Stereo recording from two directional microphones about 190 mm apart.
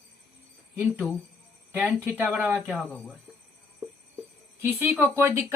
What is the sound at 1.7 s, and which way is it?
Speech, 10° right (ahead or behind).